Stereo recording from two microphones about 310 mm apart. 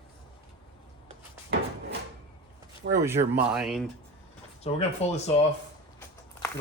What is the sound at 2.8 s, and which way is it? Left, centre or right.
Speech, right.